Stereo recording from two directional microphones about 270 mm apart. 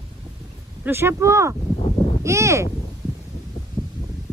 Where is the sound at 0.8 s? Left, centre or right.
Centre.